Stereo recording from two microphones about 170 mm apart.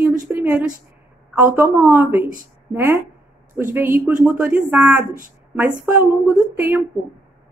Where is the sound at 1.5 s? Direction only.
10° right (ahead or behind).